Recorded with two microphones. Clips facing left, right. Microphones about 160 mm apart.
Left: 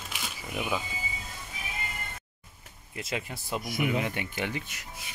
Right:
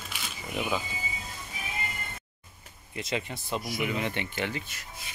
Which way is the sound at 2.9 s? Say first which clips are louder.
Right 2 dB; 5° left (ahead or behind).